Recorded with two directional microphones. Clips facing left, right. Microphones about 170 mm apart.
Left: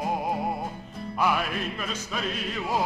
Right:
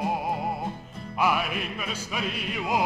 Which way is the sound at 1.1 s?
5° right (ahead or behind).